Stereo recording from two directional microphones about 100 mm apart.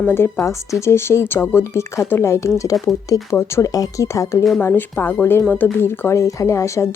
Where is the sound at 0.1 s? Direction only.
25° left (ahead or behind).